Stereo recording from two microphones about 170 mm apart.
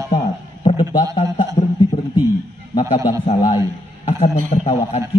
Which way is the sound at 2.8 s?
40° left (ahead or behind).